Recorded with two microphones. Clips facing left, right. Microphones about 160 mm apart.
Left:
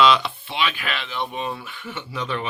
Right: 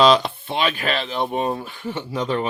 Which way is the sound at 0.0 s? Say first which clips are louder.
Right 3 dB; 40° right (ahead or behind).